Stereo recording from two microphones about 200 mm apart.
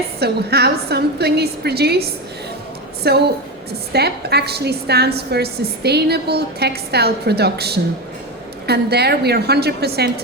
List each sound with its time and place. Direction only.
0.2 s a woman's voice: 55° right (ahead or behind)